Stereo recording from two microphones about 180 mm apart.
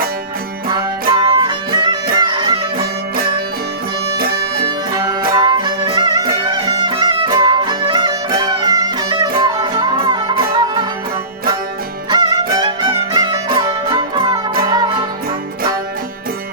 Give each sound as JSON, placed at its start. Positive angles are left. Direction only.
{"t": 1.1, "sound": "music", "side_deg": -25}
{"t": 4.2, "sound": "music", "side_deg": -60}
{"t": 5.3, "sound": "music", "side_deg": -25}
{"t": 12.1, "sound": "music", "side_deg": -25}